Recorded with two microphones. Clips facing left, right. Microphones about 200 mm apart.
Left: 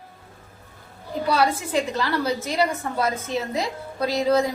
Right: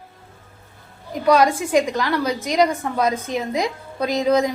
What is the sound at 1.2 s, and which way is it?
A woman's voice, 15° right (ahead or behind).